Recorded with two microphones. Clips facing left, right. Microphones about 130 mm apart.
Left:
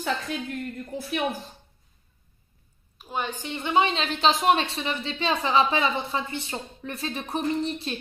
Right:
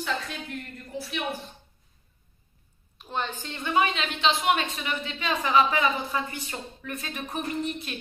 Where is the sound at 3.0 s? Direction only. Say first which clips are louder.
Left 1 dB; 10° left (ahead or behind).